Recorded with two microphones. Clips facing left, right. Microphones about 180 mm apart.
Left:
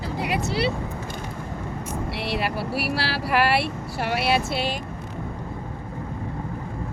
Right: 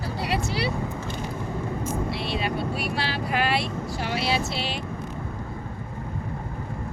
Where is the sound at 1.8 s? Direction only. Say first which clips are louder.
Right 1 dB; 70° left (ahead or behind); by 4.8 s 50° left (ahead or behind).